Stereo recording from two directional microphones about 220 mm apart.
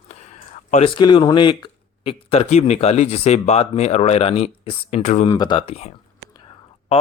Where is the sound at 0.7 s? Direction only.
25° left (ahead or behind).